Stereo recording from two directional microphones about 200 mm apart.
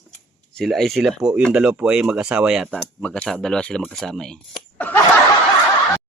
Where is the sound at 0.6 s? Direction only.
Centre (ahead or behind).